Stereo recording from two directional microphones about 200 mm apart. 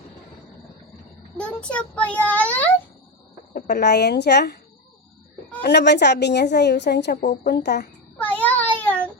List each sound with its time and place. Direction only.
1.4 s a child's voice: 5° left (ahead or behind)
3.5 s a woman's voice: 55° left (ahead or behind)
5.6 s a woman's voice: 60° left (ahead or behind)
8.2 s child singing: 10° left (ahead or behind)